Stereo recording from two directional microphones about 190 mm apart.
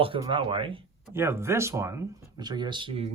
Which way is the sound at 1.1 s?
15° right (ahead or behind).